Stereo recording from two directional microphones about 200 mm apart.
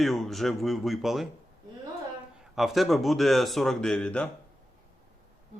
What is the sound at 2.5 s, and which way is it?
Speech, centre (ahead or behind).